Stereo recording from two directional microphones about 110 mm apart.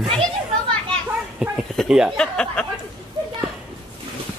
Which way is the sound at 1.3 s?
5° right (ahead or behind).